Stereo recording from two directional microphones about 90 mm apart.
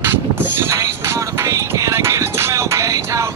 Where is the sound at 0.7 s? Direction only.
35° right (ahead or behind).